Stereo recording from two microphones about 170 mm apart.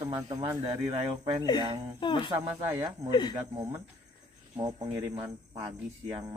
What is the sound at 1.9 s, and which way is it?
Speech, 30° left (ahead or behind).